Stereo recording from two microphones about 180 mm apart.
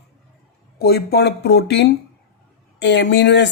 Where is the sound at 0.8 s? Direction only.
65° left (ahead or behind).